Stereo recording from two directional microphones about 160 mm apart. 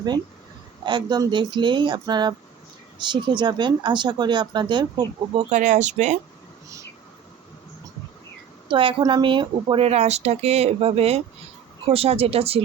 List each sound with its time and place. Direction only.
0.9 s speech: 25° right (ahead or behind)
5.4 s speech: 50° right (ahead or behind)
8.7 s speech: 30° right (ahead or behind)